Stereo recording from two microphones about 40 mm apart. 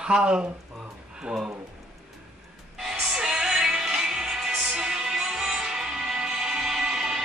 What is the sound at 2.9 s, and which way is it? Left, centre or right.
Music, centre.